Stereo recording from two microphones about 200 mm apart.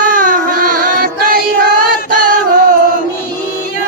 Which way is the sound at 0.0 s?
40° right (ahead or behind).